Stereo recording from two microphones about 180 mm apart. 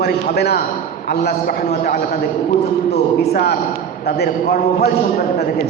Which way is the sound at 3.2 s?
65° left (ahead or behind).